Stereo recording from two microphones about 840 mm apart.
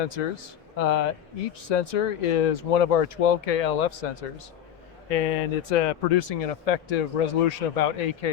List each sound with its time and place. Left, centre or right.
0.0 s speech: left
5.1 s speech: left